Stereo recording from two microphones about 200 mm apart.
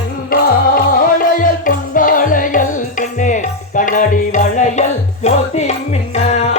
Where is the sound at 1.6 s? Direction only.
40° left (ahead or behind).